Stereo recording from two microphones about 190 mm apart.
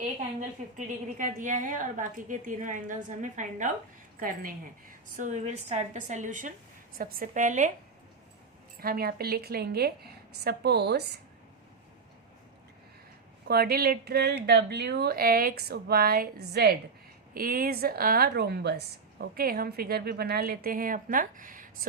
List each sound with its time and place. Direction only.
0.8 s a woman's voice: 40° right (ahead or behind)
8.8 s a woman's voice: 50° right (ahead or behind)
13.5 s a woman's voice: 55° right (ahead or behind)